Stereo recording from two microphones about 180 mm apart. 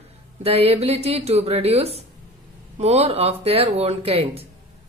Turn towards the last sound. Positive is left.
turn(degrees=-35)  # may be behind; listen again after turning